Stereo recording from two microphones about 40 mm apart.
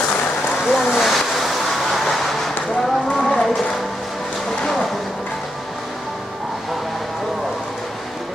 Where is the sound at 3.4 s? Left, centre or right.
Centre.